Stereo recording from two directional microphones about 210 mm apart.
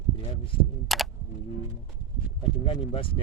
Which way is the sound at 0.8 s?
Centre (ahead or behind).